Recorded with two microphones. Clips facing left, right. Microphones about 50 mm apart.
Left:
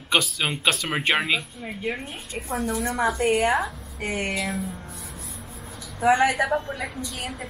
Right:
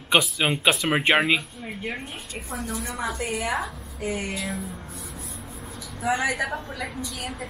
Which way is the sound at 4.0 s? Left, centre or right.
Left.